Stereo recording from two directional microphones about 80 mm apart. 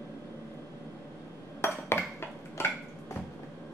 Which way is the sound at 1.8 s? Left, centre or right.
Left.